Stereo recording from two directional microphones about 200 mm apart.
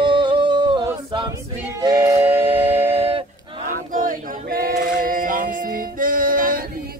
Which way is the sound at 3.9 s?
45° right (ahead or behind).